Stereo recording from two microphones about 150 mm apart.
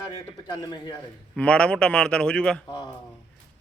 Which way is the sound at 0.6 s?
25° left (ahead or behind).